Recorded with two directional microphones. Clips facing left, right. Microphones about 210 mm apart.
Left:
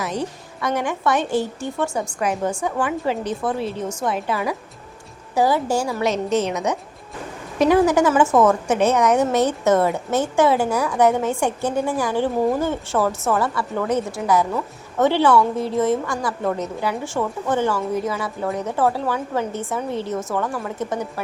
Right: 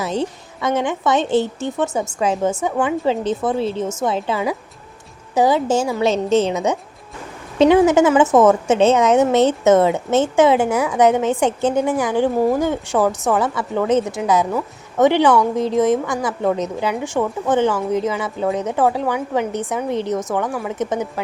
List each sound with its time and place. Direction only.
0.0 s a woman's voice: 25° right (ahead or behind)